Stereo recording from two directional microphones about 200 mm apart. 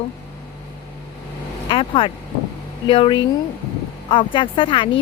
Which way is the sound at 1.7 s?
25° left (ahead or behind).